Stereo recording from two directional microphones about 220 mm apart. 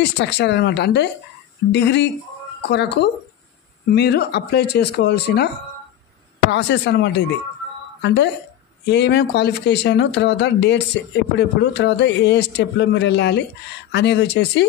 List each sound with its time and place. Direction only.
0.0 s a man's voice: 50° left (ahead or behind)
6.5 s a man's voice: 55° left (ahead or behind)